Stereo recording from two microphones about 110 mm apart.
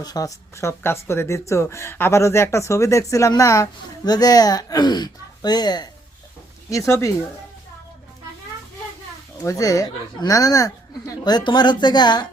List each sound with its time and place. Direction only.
0.0 s speech: 35° left (ahead or behind)
6.7 s speech: 30° left (ahead or behind)
9.4 s speech: 30° left (ahead or behind)